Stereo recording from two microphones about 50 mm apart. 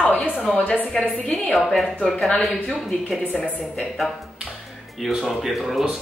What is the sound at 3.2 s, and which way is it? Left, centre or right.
Speech, left.